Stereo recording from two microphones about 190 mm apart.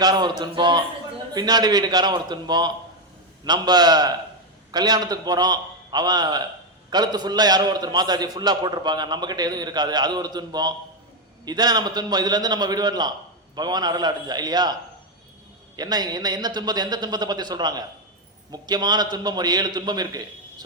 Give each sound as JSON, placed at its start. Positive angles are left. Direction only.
{"t": 0.0, "sound": "a man's voice", "side_deg": -20}